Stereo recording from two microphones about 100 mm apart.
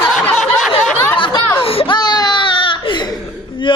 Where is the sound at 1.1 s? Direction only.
55° left (ahead or behind).